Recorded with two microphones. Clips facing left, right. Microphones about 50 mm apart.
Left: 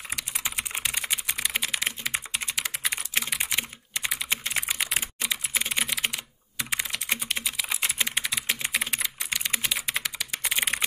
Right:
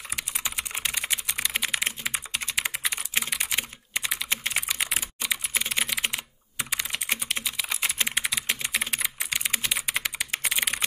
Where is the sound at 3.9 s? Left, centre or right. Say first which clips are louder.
Right 1 dB; right.